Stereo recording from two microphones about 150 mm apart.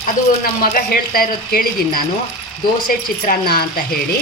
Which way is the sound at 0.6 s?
75° left (ahead or behind).